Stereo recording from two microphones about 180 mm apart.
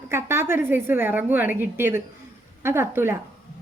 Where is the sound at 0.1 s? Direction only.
15° right (ahead or behind).